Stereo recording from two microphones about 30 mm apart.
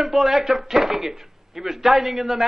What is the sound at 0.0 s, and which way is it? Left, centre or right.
A man's voice, centre.